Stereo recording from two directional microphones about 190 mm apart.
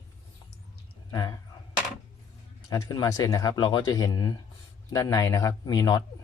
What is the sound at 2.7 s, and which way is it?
Speech, 20° left (ahead or behind).